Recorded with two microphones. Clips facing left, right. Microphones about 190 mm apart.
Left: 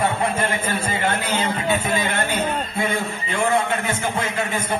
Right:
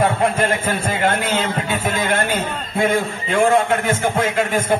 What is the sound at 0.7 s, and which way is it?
Speech, 50° right (ahead or behind).